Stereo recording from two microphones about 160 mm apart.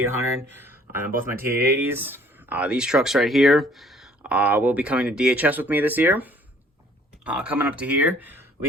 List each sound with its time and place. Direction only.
0.1 s speech: 15° right (ahead or behind)